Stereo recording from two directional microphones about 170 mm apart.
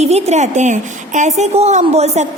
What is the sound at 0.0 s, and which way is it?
A woman's voice, 40° right (ahead or behind).